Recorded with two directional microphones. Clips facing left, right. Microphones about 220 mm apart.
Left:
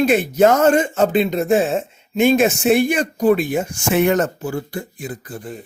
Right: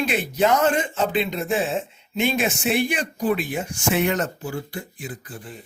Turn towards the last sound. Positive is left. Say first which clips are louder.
# left 6 dB
turn(degrees=45)  # may be behind; listen again after turning